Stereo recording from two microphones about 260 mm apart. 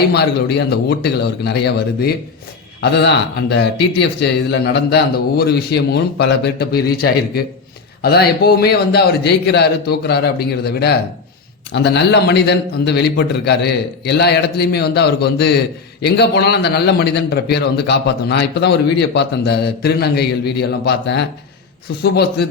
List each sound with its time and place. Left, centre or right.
0.1 s speech: left